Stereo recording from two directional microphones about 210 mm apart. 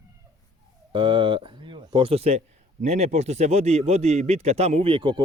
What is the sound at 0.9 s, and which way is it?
Speech, 25° right (ahead or behind).